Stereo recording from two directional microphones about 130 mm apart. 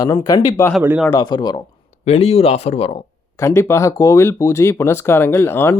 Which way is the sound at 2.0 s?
50° left (ahead or behind).